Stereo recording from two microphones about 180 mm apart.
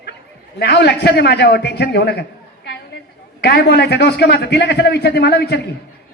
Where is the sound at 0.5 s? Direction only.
65° left (ahead or behind).